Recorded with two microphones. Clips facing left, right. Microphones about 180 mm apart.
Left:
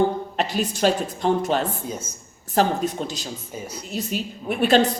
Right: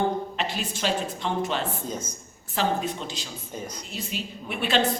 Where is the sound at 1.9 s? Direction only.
10° left (ahead or behind).